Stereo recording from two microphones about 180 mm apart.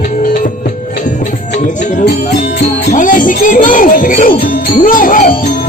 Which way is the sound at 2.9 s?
45° left (ahead or behind).